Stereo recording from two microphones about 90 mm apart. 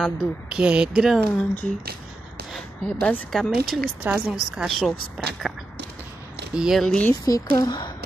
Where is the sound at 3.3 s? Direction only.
5° left (ahead or behind).